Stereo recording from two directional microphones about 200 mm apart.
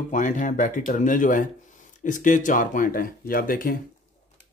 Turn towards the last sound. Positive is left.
turn(degrees=45)  # may be behind; listen again after turning